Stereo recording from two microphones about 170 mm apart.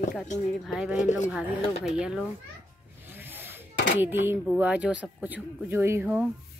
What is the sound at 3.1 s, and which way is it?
Zipper, 10° right (ahead or behind).